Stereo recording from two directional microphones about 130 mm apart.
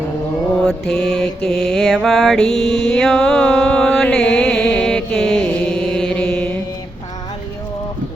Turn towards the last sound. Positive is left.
turn(degrees=10)  # may be behind; listen again after turning